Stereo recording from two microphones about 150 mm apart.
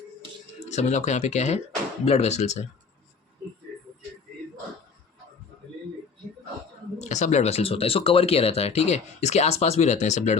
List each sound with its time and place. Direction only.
0.7 s speech: 50° left (ahead or behind)
7.0 s speech: 50° left (ahead or behind)